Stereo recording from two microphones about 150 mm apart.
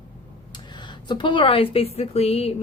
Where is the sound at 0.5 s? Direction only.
30° left (ahead or behind).